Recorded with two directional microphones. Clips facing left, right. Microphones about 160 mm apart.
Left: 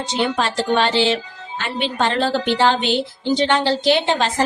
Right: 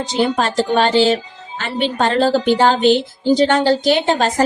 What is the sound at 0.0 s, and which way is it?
A woman's voice, 40° right (ahead or behind).